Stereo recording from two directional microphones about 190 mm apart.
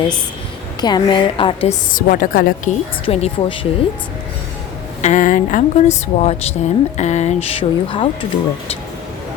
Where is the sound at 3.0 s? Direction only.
30° left (ahead or behind).